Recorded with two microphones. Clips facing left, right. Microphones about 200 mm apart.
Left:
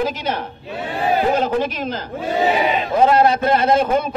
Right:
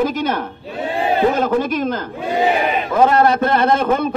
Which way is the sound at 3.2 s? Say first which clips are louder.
Right 1 dB; 55° right (ahead or behind).